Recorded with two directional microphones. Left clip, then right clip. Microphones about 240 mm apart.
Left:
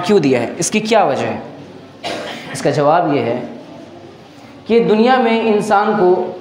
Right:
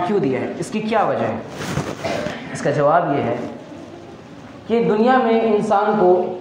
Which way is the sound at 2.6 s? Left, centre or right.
Left.